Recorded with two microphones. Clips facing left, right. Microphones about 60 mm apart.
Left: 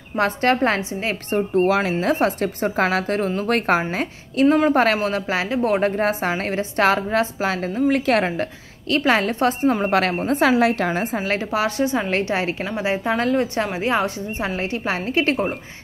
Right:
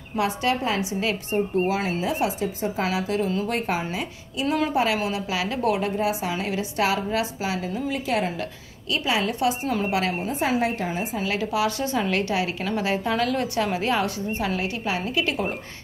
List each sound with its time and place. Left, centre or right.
0.2 s a woman's voice: left
1.3 s a woman's voice: left
2.4 s a woman's voice: left
4.9 s a woman's voice: left
5.8 s a woman's voice: left
9.9 s a woman's voice: left
11.1 s a woman's voice: left
11.8 s a woman's voice: left